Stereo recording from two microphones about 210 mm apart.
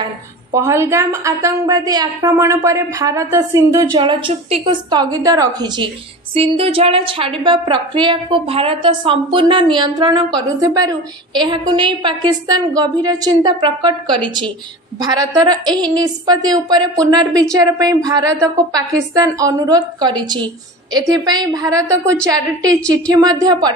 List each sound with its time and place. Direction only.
0.6 s a woman's voice: 15° right (ahead or behind)